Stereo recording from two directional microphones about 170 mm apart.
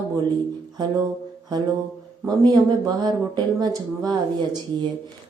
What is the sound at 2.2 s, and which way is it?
Speech, 25° right (ahead or behind).